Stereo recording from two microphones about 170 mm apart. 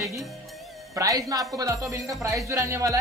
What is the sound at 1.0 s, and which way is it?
Speech, 20° right (ahead or behind).